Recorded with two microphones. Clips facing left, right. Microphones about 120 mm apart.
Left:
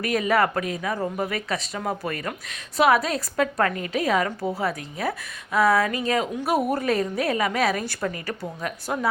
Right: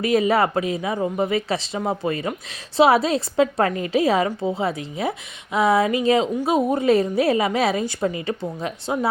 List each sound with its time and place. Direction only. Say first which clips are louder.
0.0 s a woman's voice: right 3 dB; 25° right (ahead or behind)